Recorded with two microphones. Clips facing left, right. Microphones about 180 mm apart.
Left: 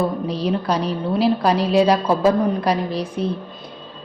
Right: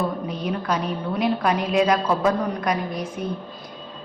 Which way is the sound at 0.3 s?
35° left (ahead or behind).